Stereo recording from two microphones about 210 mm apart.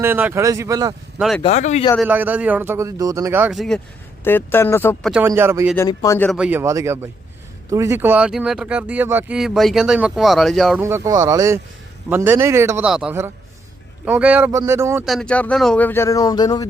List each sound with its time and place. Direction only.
0.0 s a man's voice: 10° right (ahead or behind)
1.4 s speech: 30° left (ahead or behind)
2.0 s a man's voice: 10° right (ahead or behind)
4.2 s speech: 10° left (ahead or behind)
5.0 s a man's voice: 5° right (ahead or behind)
5.7 s speech: 15° left (ahead or behind)
6.3 s a man's voice: 5° right (ahead or behind)
10.8 s a man's voice: 15° right (ahead or behind)
15.0 s speech: centre (ahead or behind); by 16.6 s 20° left (ahead or behind)